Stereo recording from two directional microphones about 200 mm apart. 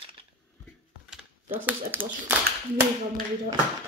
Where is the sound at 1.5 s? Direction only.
10° right (ahead or behind).